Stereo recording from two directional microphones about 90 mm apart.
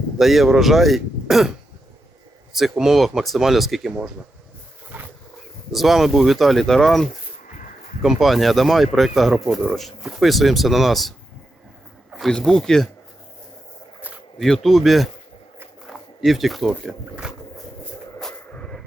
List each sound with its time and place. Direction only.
0.2 s speech: centre (ahead or behind)
2.6 s speech: 5° right (ahead or behind)
4.9 s wild animals: 20° right (ahead or behind)
5.7 s speech: centre (ahead or behind)
12.1 s speech: 5° left (ahead or behind)
14.3 s speech: 5° left (ahead or behind)
18.5 s music: 10° left (ahead or behind)